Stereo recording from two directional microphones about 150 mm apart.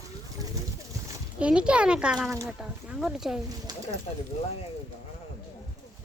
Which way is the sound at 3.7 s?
25° right (ahead or behind).